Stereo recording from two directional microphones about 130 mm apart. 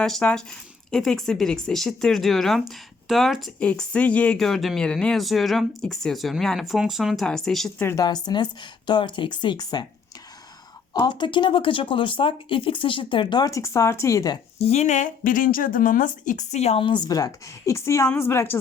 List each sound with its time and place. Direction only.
0.0 s speech: 5° left (ahead or behind)
7.8 s speech: 20° left (ahead or behind)
8.0 s speech: 35° left (ahead or behind)
10.9 s speech: 35° left (ahead or behind)
14.6 s speech: 55° left (ahead or behind)
17.1 s a woman's voice: 30° left (ahead or behind)